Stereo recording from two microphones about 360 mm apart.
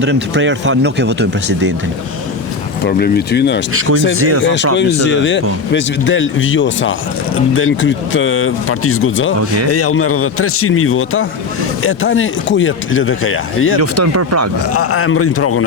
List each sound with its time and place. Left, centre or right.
0.0 s a man's voice: right
2.8 s speech: left
4.2 s speech: right
4.4 s speech: left
13.7 s speech: right
14.7 s speech: left